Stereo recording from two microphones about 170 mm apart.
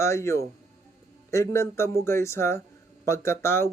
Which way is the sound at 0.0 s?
15° left (ahead or behind).